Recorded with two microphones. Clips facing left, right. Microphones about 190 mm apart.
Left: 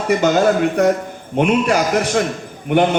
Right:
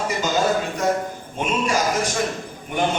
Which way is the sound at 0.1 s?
60° left (ahead or behind).